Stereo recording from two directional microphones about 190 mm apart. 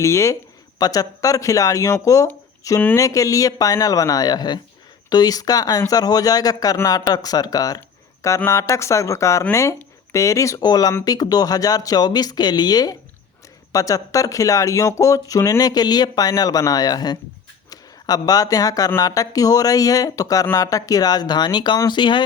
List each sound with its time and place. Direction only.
0.0 s speech: 15° left (ahead or behind)